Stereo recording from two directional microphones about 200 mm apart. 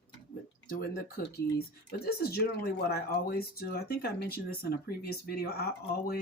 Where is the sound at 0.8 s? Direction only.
50° left (ahead or behind).